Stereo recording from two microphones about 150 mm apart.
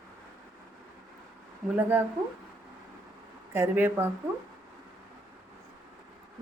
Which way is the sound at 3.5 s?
15° right (ahead or behind).